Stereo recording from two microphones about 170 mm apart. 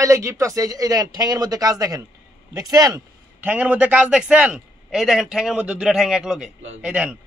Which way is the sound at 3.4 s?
10° right (ahead or behind).